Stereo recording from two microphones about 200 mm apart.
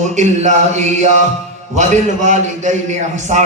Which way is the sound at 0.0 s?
35° right (ahead or behind).